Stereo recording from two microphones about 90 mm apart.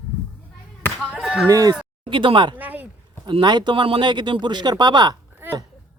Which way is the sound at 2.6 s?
20° right (ahead or behind).